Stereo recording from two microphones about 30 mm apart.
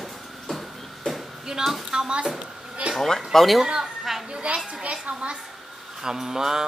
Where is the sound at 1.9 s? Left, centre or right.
Right.